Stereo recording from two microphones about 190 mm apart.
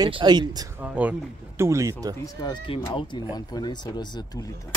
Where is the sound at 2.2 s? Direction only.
25° left (ahead or behind).